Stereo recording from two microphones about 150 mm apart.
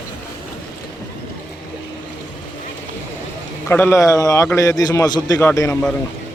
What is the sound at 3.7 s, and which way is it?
A man's voice, 15° left (ahead or behind).